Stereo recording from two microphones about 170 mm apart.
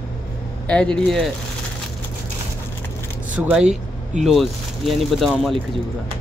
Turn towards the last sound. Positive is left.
turn(degrees=0)  # may be behind; listen again after turning